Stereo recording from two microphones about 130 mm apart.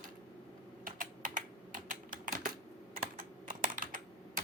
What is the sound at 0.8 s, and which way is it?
Typing, 90° right.